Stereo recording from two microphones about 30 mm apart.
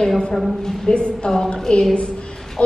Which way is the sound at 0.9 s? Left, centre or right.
Left.